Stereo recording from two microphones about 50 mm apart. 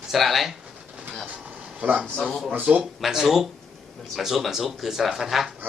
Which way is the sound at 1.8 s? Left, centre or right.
Right.